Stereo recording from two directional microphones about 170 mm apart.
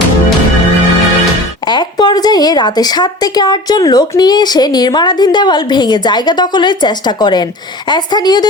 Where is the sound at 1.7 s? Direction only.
25° left (ahead or behind).